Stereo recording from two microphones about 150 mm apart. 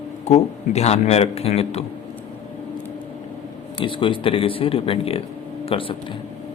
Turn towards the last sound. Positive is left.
turn(degrees=35)  # may be behind; listen again after turning